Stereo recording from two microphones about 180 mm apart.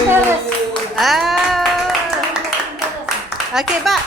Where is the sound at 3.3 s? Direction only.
Centre (ahead or behind).